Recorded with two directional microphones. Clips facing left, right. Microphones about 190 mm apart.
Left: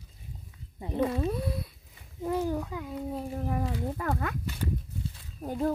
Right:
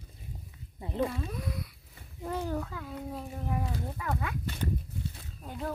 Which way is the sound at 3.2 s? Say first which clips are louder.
Left 3 dB; 40° left (ahead or behind).